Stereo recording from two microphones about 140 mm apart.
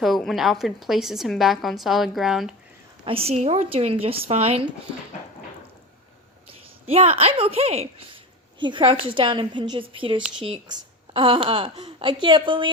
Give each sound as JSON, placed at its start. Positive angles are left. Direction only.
{"t": 0.0, "sound": "a woman's voice", "side_deg": 0}
{"t": 3.0, "sound": "speech", "side_deg": -45}
{"t": 6.5, "sound": "a woman's voice", "side_deg": -45}